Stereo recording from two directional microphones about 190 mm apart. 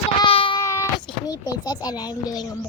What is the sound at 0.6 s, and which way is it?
A child's voice, 15° left (ahead or behind).